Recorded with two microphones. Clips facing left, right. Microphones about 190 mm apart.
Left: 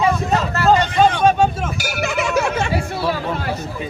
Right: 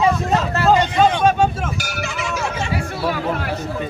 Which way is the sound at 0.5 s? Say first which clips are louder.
Left 1 dB; 20° right (ahead or behind).